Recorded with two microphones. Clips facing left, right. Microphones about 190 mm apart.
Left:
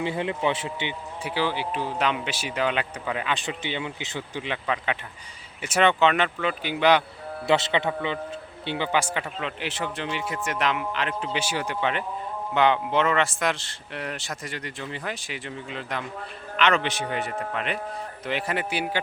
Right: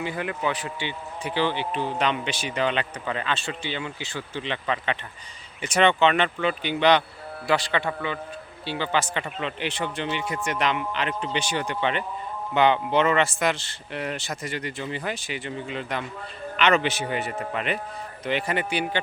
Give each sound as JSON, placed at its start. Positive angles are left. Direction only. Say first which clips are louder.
{"t": 0.0, "sound": "speech", "louder": "left 2 dB", "side_deg": 25}
{"t": 1.2, "sound": "speech", "louder": "right 1 dB", "side_deg": 5}
{"t": 4.4, "sound": "a man's voice", "louder": "right 1 dB", "side_deg": 5}
{"t": 7.4, "sound": "a man's voice", "louder": "left 2 dB", "side_deg": 25}